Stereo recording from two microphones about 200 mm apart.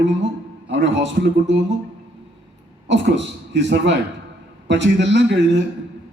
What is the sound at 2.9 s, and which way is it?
A man's voice, 65° right (ahead or behind).